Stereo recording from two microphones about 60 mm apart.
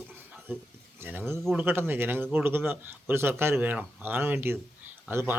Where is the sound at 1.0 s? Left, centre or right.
Right.